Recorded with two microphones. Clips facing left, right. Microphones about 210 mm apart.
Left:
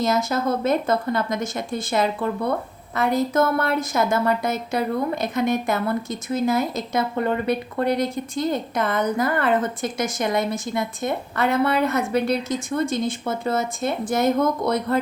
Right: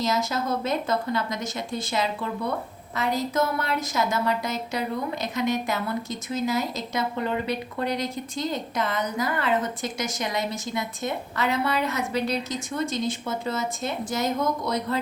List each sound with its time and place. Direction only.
0.0 s a woman's voice: 50° left (ahead or behind)